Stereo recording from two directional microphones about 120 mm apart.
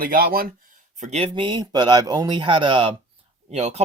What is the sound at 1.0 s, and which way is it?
Speech, 70° right (ahead or behind).